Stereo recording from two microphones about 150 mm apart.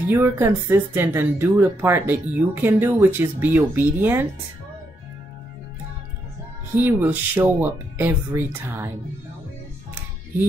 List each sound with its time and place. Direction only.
0.1 s speech: 15° right (ahead or behind)
6.7 s speech: 15° right (ahead or behind)